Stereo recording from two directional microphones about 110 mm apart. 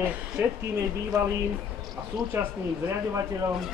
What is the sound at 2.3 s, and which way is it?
Speech, 25° right (ahead or behind).